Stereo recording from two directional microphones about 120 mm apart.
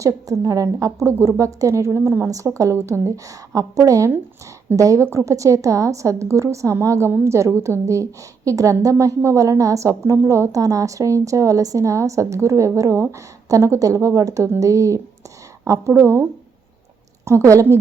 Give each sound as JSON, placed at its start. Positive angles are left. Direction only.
{"t": 0.0, "sound": "a woman's voice", "side_deg": -30}
{"t": 17.2, "sound": "a woman's voice", "side_deg": -25}